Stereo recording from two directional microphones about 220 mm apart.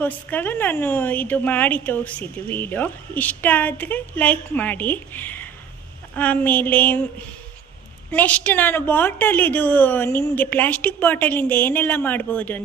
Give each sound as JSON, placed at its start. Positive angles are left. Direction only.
{"t": 0.0, "sound": "a woman's voice", "side_deg": 10}
{"t": 8.1, "sound": "a woman's voice", "side_deg": 5}